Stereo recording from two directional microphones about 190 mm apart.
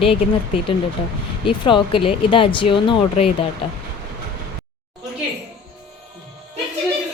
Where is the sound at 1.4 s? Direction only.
25° left (ahead or behind).